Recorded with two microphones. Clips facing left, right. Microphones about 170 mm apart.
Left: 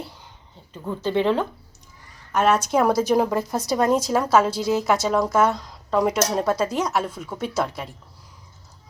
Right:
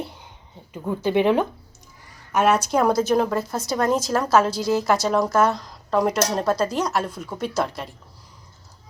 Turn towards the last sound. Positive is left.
turn(degrees=5)  # may be behind; listen again after turning